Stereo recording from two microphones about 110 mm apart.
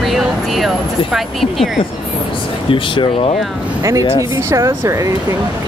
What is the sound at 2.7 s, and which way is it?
Speech, 50° left (ahead or behind).